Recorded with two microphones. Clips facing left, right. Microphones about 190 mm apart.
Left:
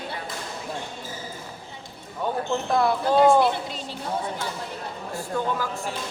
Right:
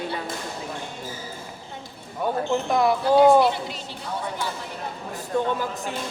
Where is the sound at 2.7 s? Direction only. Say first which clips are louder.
Even; 15° right (ahead or behind).